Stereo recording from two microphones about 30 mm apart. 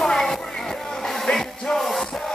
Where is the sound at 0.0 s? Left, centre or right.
Centre.